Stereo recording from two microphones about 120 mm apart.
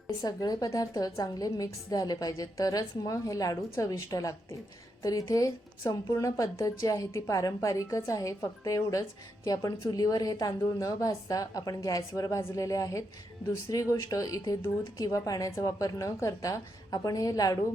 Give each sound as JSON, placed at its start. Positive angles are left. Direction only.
{"t": 0.2, "sound": "a woman's voice", "side_deg": 30}